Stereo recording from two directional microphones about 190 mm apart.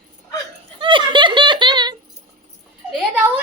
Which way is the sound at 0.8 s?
25° right (ahead or behind).